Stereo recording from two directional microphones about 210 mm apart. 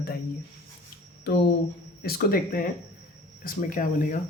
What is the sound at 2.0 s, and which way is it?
Speech, 45° left (ahead or behind).